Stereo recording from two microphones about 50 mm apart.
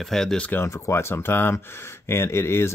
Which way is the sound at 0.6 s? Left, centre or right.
Left.